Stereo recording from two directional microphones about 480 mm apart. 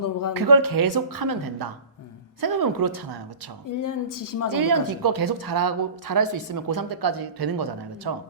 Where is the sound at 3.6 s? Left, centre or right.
Left.